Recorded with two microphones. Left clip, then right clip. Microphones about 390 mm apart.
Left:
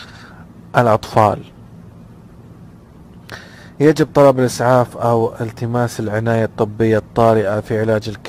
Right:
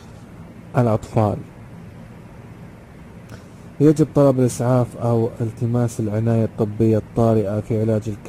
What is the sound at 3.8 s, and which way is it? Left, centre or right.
A man's voice, left.